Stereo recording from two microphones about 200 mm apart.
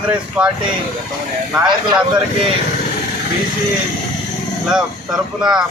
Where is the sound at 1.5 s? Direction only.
5° right (ahead or behind).